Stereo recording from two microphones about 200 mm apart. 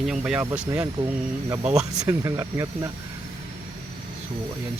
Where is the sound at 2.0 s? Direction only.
15° right (ahead or behind).